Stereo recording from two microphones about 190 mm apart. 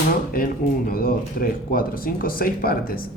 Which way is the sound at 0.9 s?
50° left (ahead or behind).